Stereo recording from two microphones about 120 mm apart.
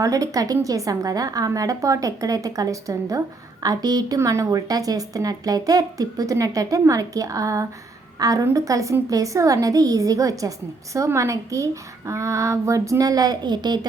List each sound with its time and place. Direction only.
0.0 s a woman's voice: 30° right (ahead or behind)